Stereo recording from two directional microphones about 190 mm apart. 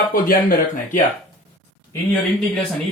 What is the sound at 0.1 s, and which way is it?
Speech, 50° left (ahead or behind).